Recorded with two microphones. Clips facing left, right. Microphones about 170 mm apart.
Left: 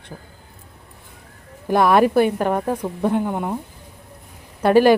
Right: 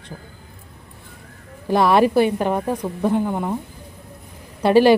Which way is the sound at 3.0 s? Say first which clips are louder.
Right 1 dB; 15° left (ahead or behind).